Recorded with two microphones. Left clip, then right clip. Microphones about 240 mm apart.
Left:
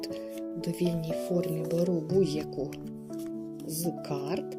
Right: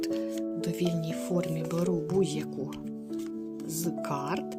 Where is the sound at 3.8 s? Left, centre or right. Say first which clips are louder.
Right 1 dB; right.